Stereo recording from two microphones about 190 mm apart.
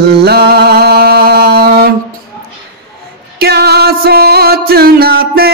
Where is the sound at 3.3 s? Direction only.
55° right (ahead or behind).